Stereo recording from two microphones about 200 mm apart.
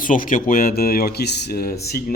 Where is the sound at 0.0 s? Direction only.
40° left (ahead or behind).